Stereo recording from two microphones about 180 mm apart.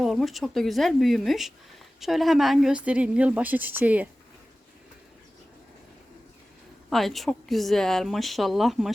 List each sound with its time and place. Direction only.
0.0 s a woman's voice: centre (ahead or behind)
6.9 s speech: centre (ahead or behind)